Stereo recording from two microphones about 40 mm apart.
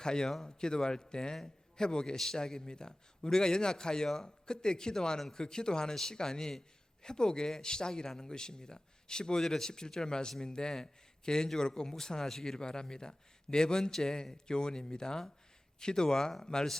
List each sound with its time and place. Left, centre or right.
0.0 s a man's voice: centre
2.1 s a man's voice: centre